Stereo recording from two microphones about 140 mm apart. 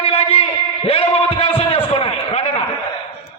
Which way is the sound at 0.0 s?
45° left (ahead or behind).